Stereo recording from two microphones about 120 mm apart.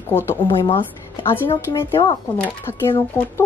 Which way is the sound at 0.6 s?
45° left (ahead or behind).